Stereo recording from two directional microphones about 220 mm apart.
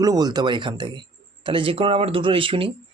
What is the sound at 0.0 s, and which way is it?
Speech, 15° right (ahead or behind).